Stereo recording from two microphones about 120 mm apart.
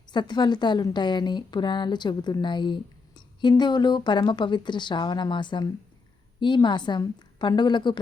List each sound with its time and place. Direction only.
0.1 s speech: 35° left (ahead or behind)